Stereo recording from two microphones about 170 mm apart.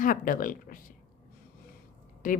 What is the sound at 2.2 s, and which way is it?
Speech, 50° left (ahead or behind).